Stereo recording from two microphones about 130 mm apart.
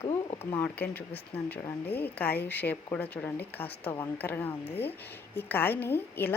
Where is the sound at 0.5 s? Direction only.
15° left (ahead or behind).